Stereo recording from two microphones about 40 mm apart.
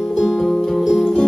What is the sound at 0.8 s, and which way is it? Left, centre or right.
Music, centre.